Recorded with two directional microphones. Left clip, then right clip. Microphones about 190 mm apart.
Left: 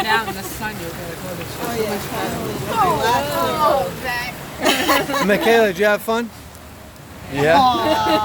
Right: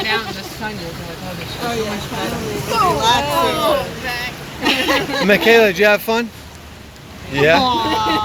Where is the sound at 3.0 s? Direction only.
55° right (ahead or behind).